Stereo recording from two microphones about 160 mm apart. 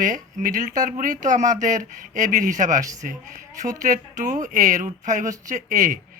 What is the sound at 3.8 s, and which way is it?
Speech, 55° right (ahead or behind).